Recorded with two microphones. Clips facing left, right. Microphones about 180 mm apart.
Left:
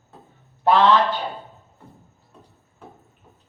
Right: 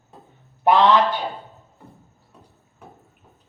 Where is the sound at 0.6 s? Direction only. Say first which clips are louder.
Right 1 dB; 15° right (ahead or behind).